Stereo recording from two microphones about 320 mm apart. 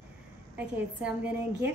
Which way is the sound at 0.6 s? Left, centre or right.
Centre.